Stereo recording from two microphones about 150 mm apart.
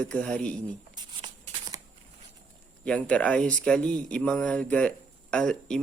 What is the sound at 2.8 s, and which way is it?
Speech, 10° left (ahead or behind).